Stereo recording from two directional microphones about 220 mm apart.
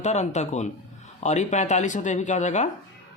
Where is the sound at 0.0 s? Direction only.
30° left (ahead or behind).